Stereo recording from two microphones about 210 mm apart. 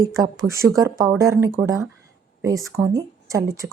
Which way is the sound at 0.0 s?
15° right (ahead or behind).